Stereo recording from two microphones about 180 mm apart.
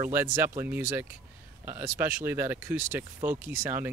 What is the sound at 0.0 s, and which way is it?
Speech, 15° right (ahead or behind).